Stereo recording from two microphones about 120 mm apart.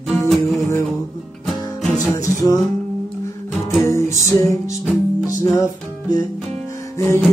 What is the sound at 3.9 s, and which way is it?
Music, 25° left (ahead or behind).